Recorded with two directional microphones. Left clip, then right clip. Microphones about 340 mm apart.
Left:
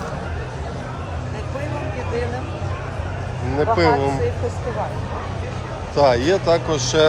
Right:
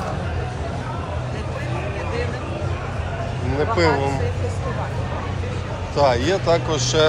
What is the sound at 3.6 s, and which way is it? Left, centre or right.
Speech, centre.